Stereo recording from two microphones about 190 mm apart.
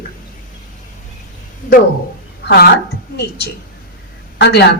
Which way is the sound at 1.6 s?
45° left (ahead or behind).